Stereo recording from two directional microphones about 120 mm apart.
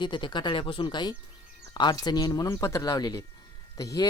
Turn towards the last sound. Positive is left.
turn(degrees=30)  # may be behind; listen again after turning